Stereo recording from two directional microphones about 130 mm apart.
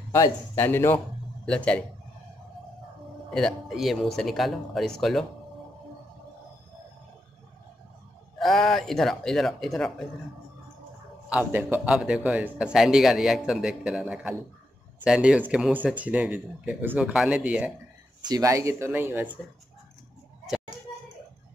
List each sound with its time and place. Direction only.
0.1 s speech: 20° left (ahead or behind)
3.3 s a man's voice: 5° left (ahead or behind)
8.4 s a man's voice: centre (ahead or behind)
11.2 s a man's voice: 15° right (ahead or behind)
18.2 s speech: 25° right (ahead or behind)